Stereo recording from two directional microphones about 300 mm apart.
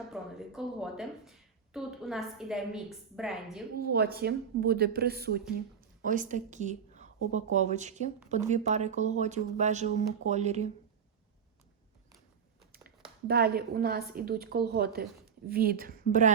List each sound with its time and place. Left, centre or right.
0.1 s a woman's voice: centre
3.8 s a woman's voice: right
12.7 s a woman's voice: right